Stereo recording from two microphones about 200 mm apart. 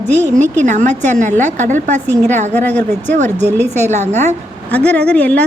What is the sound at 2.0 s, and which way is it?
A woman's voice, 10° left (ahead or behind).